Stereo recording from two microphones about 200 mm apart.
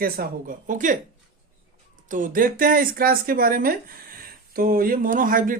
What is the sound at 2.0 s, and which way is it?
Speech, 40° right (ahead or behind).